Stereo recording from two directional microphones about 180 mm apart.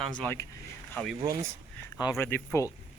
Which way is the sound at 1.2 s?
20° right (ahead or behind).